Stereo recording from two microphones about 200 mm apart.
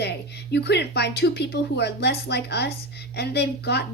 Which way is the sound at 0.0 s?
55° left (ahead or behind).